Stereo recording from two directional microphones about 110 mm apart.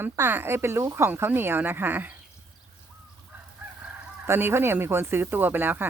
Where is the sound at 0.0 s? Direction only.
20° right (ahead or behind).